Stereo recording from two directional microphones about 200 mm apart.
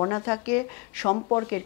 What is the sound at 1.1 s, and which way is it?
Speech, 25° left (ahead or behind).